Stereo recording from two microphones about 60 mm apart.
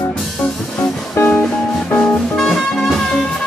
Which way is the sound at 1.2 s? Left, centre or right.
Left.